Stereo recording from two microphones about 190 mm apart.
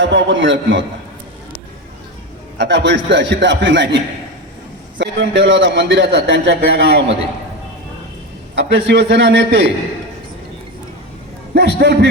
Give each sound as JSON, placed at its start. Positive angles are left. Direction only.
{"t": 0.0, "sound": "a man's voice", "side_deg": -70}
{"t": 2.6, "sound": "a man's voice", "side_deg": -65}
{"t": 8.5, "sound": "a man's voice", "side_deg": -65}
{"t": 11.5, "sound": "a man's voice", "side_deg": -65}